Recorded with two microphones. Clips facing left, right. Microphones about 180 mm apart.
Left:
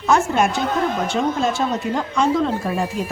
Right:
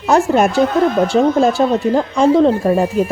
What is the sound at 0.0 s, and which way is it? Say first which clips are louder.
Speech: right 5 dB; 35° right (ahead or behind).